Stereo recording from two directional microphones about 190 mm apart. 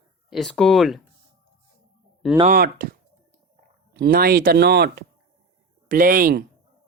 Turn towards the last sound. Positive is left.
turn(degrees=-50)  # may be behind; listen again after turning